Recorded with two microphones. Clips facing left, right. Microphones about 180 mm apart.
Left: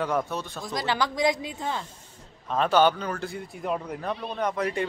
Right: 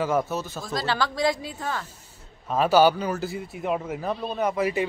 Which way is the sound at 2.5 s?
5° right (ahead or behind).